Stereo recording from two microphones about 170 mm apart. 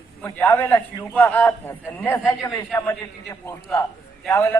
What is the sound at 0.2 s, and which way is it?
A man's voice, 10° left (ahead or behind).